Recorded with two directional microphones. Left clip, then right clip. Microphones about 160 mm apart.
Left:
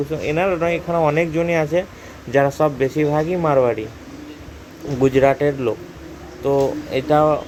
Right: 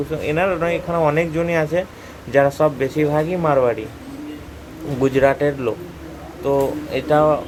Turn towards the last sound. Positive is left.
turn(degrees=20)  # may be behind; listen again after turning